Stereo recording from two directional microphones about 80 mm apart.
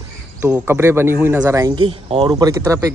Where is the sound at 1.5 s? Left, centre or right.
Right.